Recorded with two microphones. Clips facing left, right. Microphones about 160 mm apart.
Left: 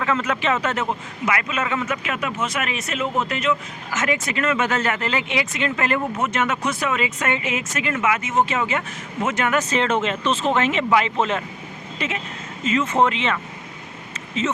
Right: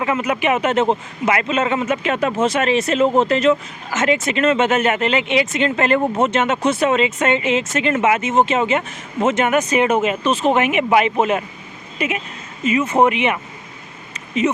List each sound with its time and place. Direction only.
0.0 s a man's voice: 15° right (ahead or behind)
14.4 s speech: 15° right (ahead or behind)